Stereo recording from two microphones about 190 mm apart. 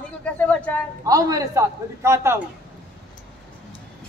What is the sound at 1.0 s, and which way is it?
A man's voice, 20° right (ahead or behind).